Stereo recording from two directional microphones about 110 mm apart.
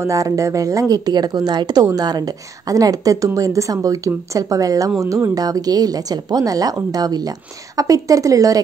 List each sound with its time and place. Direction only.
0.0 s speech: 30° right (ahead or behind)